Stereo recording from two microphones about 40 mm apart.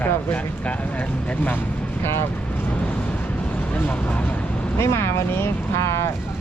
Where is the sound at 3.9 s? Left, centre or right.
Left.